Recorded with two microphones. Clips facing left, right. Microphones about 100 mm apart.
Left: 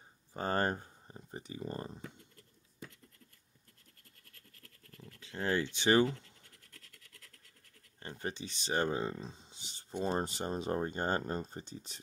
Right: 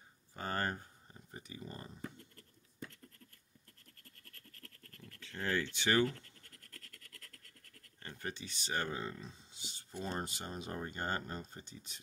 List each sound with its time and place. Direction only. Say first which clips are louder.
0.3 s speech: left 5 dB; 30° left (ahead or behind)
4.2 s a sound: right 3 dB; 10° left (ahead or behind)
8.0 s speech: left 4 dB; 25° left (ahead or behind)